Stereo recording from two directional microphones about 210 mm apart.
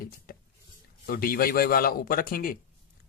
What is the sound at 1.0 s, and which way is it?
Speech, 45° left (ahead or behind).